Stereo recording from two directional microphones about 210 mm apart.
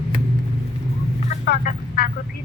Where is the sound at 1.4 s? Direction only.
50° left (ahead or behind).